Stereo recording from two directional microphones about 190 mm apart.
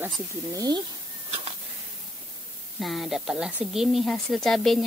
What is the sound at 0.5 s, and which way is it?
Speech, 20° right (ahead or behind).